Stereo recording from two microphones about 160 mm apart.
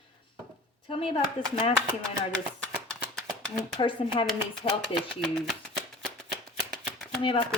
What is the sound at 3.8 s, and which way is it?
Speech, 30° left (ahead or behind).